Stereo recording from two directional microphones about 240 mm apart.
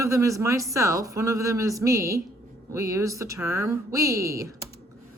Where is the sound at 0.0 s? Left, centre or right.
Centre.